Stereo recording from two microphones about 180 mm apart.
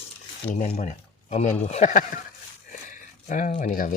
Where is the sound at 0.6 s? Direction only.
40° left (ahead or behind).